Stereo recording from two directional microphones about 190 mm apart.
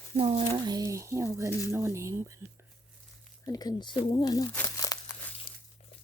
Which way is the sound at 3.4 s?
20° left (ahead or behind).